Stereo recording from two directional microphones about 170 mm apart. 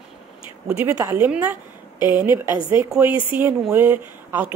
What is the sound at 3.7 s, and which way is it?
Speech, 10° right (ahead or behind).